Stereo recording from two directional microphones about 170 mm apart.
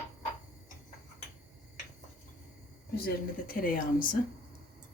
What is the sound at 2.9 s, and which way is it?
Speech, 60° left (ahead or behind).